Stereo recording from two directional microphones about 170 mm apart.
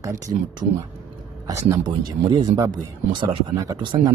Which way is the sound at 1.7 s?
25° right (ahead or behind).